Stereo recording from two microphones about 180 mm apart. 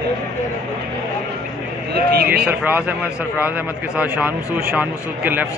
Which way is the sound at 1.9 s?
60° right (ahead or behind).